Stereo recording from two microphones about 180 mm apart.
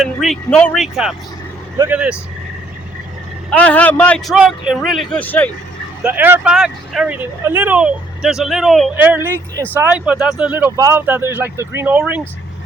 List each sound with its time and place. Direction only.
0.0 s speech: centre (ahead or behind)
3.5 s a man's voice: 5° left (ahead or behind)
4.4 s speech: 5° right (ahead or behind)
6.0 s speech: 10° right (ahead or behind)
9.1 s speech: 10° right (ahead or behind)